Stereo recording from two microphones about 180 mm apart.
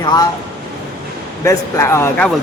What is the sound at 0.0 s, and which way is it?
Speech, 20° left (ahead or behind).